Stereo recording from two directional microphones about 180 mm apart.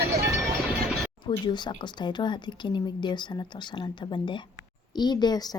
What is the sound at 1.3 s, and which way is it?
Speech, 25° left (ahead or behind).